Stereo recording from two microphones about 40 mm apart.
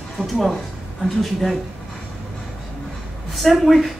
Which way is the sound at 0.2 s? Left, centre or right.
Centre.